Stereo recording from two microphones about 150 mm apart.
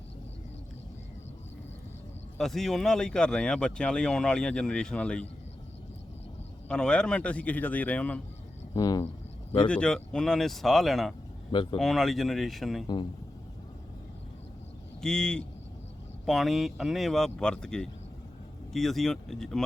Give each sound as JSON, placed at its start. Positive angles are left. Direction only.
{"t": 2.4, "sound": "speech", "side_deg": 0}
{"t": 6.7, "sound": "a man's voice", "side_deg": 5}
{"t": 8.7, "sound": "speech", "side_deg": 25}
{"t": 9.6, "sound": "speech", "side_deg": 5}
{"t": 11.5, "sound": "speech", "side_deg": 35}
{"t": 11.8, "sound": "speech", "side_deg": 0}
{"t": 15.0, "sound": "speech", "side_deg": 5}